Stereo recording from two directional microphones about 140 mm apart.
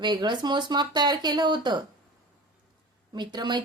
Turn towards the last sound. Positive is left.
turn(degrees=-30)  # may be behind; listen again after turning